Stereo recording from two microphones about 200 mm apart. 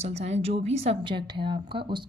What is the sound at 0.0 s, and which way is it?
A woman's voice, 30° right (ahead or behind).